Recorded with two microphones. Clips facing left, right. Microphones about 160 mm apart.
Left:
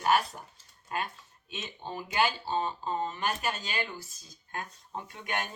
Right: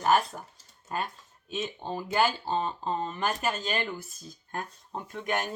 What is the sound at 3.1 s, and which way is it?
Speech, 45° right (ahead or behind).